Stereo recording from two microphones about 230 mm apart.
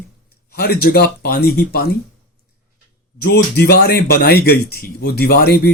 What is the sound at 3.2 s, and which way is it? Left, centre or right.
Speech, left.